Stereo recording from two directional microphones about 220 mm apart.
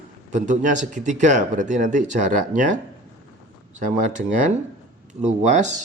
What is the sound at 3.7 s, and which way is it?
Speech, 35° right (ahead or behind).